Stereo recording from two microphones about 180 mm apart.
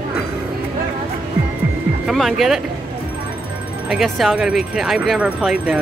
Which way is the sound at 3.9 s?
Centre (ahead or behind).